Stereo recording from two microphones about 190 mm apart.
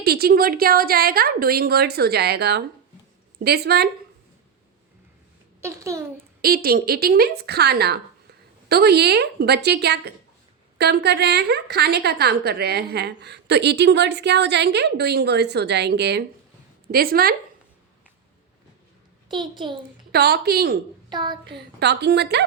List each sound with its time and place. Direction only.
0.0 s a woman's voice: 55° right (ahead or behind)
5.5 s a child's voice: 15° right (ahead or behind)
6.4 s a woman's voice: 55° right (ahead or behind)
16.9 s a woman's voice: 50° right (ahead or behind)
19.3 s a child's voice: 25° right (ahead or behind)
20.1 s a woman's voice: 55° right (ahead or behind)
21.1 s child singing: 25° right (ahead or behind)
21.4 s a woman's voice: 60° right (ahead or behind)